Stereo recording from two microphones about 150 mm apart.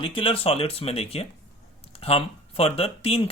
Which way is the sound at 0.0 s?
35° left (ahead or behind).